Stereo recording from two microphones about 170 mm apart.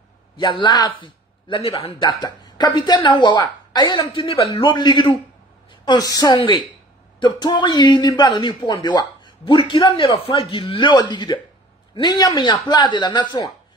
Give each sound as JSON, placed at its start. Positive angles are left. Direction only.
{"t": 0.4, "sound": "a man's voice", "side_deg": 30}